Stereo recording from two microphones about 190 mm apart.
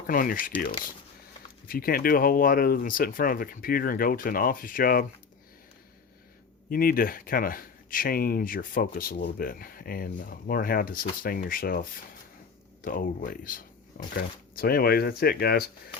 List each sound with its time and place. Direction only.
0.1 s speech: 45° left (ahead or behind)
6.7 s speech: 50° left (ahead or behind)